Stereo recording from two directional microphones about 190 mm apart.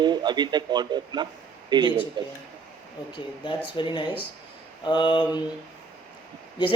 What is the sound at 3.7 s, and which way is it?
Speech, 25° left (ahead or behind).